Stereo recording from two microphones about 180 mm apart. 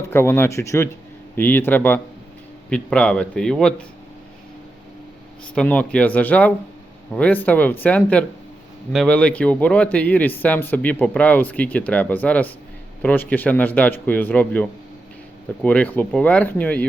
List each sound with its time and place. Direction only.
0.1 s a man's voice: 15° left (ahead or behind)
5.5 s a man's voice: 5° left (ahead or behind)